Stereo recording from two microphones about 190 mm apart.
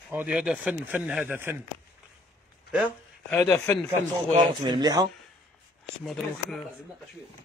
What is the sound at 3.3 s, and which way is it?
Speech, 10° left (ahead or behind).